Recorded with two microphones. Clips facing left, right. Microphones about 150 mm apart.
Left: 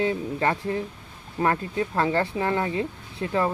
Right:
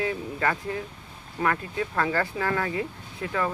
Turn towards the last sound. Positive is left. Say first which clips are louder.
# left 4 dB
turn(degrees=30)  # may be behind; listen again after turning